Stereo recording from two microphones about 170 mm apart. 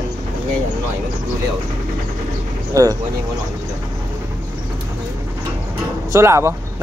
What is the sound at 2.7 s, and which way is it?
Speech, 20° right (ahead or behind).